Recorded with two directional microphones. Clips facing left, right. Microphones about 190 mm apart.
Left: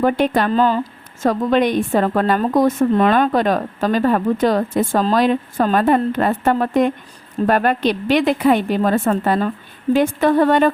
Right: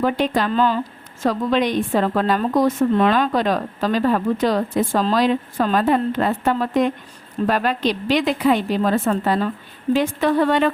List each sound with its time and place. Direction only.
0.0 s a woman's voice: 55° left (ahead or behind)